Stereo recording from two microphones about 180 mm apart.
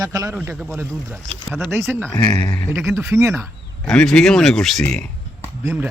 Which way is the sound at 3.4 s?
Centre (ahead or behind).